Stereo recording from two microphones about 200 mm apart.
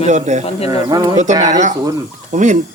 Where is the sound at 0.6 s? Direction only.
20° right (ahead or behind).